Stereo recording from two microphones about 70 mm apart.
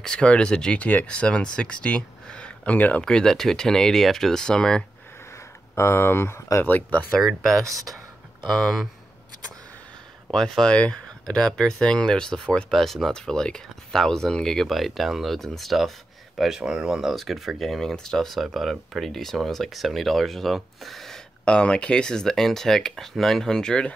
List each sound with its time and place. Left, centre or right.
0.0 s speech: centre
3.0 s speech: centre
5.8 s speech: left
6.6 s speech: left
7.4 s speech: centre
10.3 s speech: centre
21.5 s speech: centre